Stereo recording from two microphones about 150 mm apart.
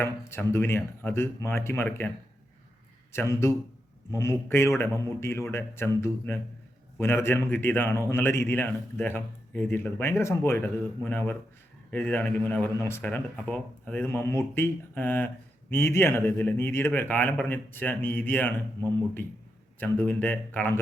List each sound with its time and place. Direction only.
0.0 s speech: 15° left (ahead or behind)
3.1 s speech: 15° left (ahead or behind)